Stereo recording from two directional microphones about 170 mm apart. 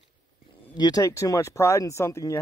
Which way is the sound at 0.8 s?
20° left (ahead or behind).